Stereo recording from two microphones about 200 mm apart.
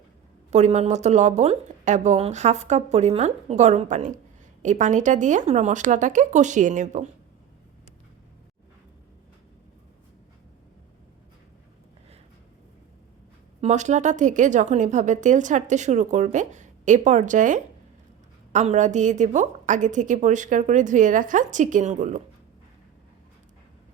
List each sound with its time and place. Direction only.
0.5 s a woman's voice: 35° right (ahead or behind)
13.6 s a woman's voice: 35° right (ahead or behind)